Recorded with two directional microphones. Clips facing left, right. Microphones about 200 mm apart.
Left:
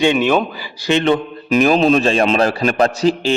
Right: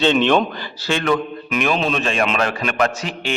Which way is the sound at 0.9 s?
25° left (ahead or behind).